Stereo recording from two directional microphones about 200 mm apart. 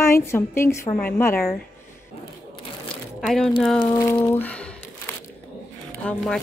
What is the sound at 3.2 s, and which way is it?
Speech, 5° left (ahead or behind).